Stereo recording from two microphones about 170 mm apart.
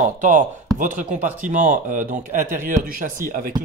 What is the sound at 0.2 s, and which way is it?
Speech, 50° right (ahead or behind).